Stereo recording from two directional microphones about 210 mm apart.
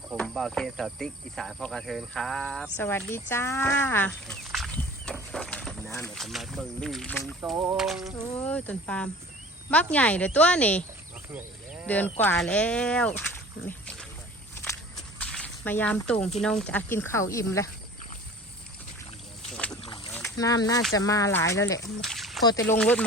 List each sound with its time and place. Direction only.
0.2 s speech: centre (ahead or behind)
7.5 s speech: 10° right (ahead or behind)
11.3 s cattle: 10° right (ahead or behind)
11.9 s speech: 10° left (ahead or behind)
13.7 s a sound: 5° left (ahead or behind)
14.5 s walk: 10° left (ahead or behind)
16.4 s speech: 5° left (ahead or behind)
20.1 s speech: 15° left (ahead or behind)
22.0 s a sound: centre (ahead or behind)
22.8 s speech: 5° left (ahead or behind)